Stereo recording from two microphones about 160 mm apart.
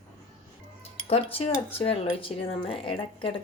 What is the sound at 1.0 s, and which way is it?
Cutlery, 35° left (ahead or behind).